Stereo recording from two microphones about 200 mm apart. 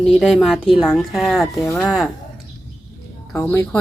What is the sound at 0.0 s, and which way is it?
Speech, centre (ahead or behind).